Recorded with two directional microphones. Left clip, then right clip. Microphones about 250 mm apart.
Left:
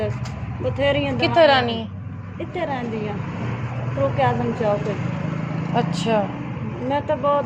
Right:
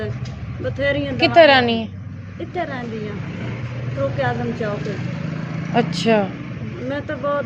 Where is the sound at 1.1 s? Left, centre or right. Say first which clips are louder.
Right 5 dB; right.